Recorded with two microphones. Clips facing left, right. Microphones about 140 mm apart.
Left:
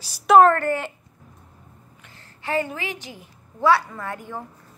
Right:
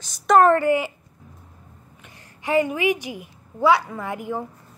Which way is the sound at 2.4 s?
15° right (ahead or behind).